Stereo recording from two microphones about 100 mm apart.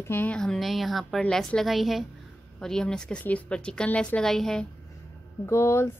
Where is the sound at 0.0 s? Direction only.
20° left (ahead or behind).